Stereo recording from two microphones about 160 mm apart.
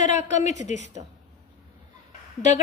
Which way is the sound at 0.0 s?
45° left (ahead or behind).